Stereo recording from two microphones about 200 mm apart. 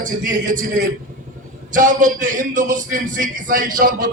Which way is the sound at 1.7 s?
40° right (ahead or behind).